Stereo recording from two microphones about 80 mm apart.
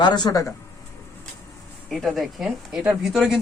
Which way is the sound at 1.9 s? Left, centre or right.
Centre.